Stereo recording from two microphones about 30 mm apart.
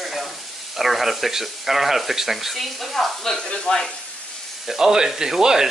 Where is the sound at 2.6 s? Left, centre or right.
Centre.